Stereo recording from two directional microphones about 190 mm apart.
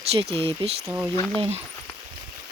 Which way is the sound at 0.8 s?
10° right (ahead or behind).